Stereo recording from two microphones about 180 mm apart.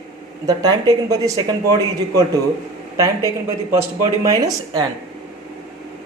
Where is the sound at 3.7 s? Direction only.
20° right (ahead or behind).